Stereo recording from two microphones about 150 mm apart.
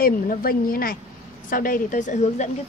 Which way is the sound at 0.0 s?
75° left (ahead or behind).